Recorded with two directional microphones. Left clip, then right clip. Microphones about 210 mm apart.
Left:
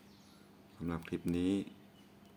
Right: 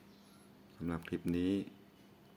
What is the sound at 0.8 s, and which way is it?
Speech, 5° right (ahead or behind).